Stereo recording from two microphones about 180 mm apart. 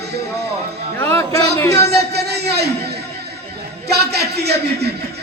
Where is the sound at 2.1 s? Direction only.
65° right (ahead or behind).